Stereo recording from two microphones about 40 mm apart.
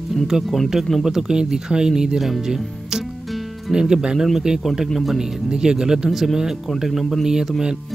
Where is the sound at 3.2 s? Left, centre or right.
Centre.